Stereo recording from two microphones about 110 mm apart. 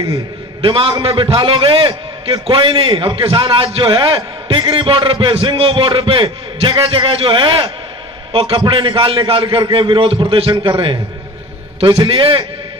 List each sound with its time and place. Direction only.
0.6 s a man's voice: 55° right (ahead or behind)
12.1 s a man's voice: 55° right (ahead or behind)